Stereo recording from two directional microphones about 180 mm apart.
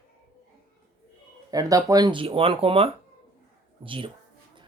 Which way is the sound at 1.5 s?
20° right (ahead or behind).